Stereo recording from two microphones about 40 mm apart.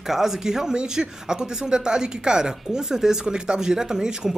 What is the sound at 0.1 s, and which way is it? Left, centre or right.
Speech, centre.